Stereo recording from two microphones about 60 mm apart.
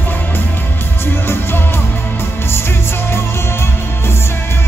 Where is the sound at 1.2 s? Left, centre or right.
Left.